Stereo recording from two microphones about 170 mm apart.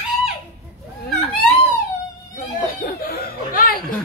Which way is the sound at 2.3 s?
60° left (ahead or behind).